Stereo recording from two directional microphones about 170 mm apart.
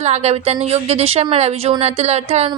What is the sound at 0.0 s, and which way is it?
A woman's voice, 40° right (ahead or behind).